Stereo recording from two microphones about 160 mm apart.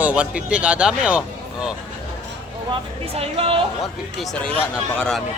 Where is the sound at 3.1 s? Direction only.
40° right (ahead or behind).